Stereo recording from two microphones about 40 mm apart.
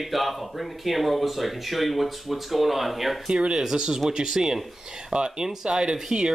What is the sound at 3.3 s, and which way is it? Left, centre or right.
Speech, centre.